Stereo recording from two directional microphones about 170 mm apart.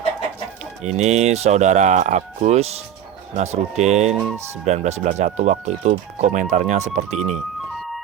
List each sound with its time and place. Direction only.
0.8 s speech: 40° right (ahead or behind)
4.4 s speech: 15° right (ahead or behind)
4.6 s speech: 40° right (ahead or behind)